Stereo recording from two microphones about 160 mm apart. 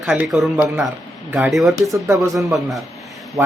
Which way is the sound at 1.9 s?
20° right (ahead or behind).